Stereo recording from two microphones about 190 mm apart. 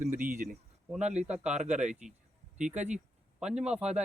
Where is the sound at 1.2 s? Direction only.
5° right (ahead or behind).